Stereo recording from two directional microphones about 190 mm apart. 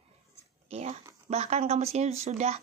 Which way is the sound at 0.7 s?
35° right (ahead or behind).